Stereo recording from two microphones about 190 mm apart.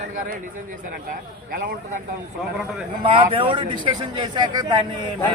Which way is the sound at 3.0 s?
30° right (ahead or behind).